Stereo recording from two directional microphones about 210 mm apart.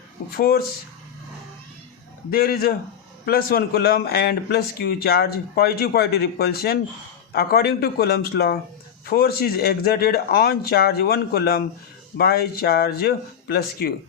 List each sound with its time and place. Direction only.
0.3 s a man's voice: 45° left (ahead or behind)
2.3 s a man's voice: 45° left (ahead or behind)